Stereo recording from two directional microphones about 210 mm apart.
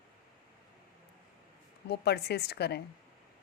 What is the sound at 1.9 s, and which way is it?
Speech, 50° left (ahead or behind).